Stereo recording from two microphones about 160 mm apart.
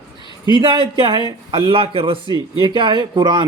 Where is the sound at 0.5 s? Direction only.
30° right (ahead or behind).